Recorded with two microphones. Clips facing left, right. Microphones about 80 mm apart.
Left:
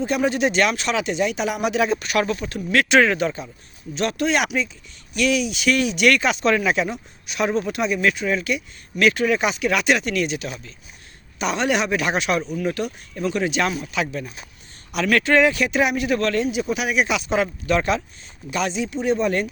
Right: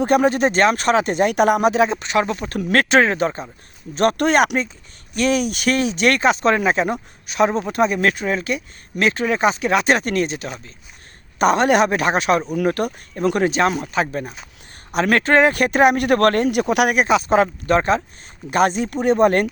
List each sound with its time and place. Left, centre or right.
0.0 s speech: right
1.7 s speech: right
3.9 s speech: right
11.3 s speech: right
12.5 s speech: right
17.0 s speech: right
18.5 s speech: right